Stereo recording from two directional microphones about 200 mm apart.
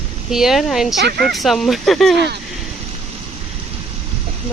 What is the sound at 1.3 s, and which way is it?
Speech, centre (ahead or behind).